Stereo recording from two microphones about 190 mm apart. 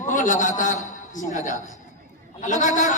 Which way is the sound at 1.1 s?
40° left (ahead or behind).